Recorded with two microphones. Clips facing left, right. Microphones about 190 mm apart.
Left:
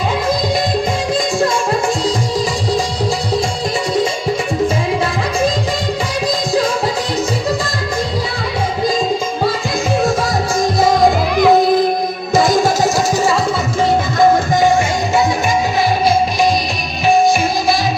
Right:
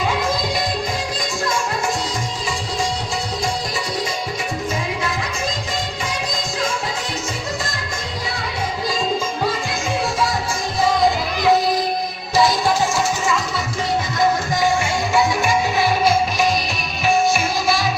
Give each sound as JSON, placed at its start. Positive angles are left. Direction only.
{"t": 10.8, "sound": "music", "side_deg": 45}